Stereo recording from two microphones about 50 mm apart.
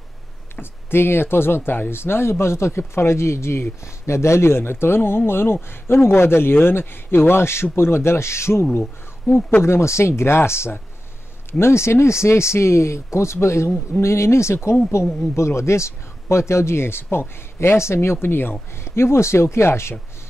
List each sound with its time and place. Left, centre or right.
0.6 s speech: left
18.9 s speech: left